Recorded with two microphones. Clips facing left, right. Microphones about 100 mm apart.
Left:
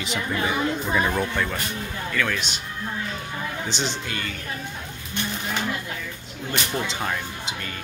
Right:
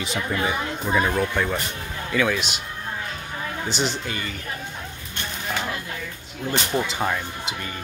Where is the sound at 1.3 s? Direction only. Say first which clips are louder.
Right 2 dB; 10° right (ahead or behind).